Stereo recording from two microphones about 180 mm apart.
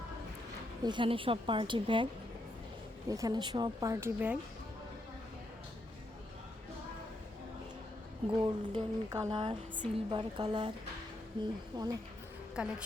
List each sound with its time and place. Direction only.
0.8 s a woman's voice: 25° right (ahead or behind)
3.1 s a woman's voice: 20° right (ahead or behind)
8.3 s a woman's voice: 25° right (ahead or behind)
11.7 s a woman's voice: 25° right (ahead or behind)
12.6 s a woman's voice: 5° right (ahead or behind)